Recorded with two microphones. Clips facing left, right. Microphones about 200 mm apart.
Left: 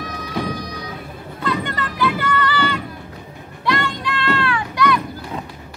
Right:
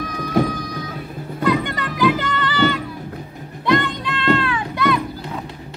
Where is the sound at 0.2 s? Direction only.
50° right (ahead or behind).